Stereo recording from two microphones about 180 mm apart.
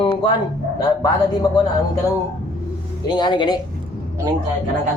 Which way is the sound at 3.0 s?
25° left (ahead or behind).